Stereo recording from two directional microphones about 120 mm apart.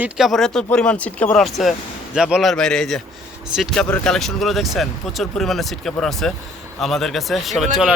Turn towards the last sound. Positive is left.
turn(degrees=0)  # may be behind; listen again after turning